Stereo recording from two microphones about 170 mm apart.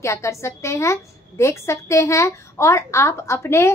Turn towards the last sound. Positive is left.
turn(degrees=15)  # may be behind; listen again after turning